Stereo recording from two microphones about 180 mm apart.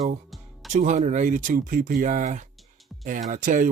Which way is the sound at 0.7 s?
40° right (ahead or behind).